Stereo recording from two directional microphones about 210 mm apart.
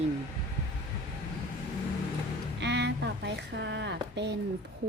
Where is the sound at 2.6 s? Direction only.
55° right (ahead or behind).